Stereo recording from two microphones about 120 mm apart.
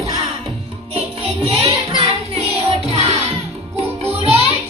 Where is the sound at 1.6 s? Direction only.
50° right (ahead or behind).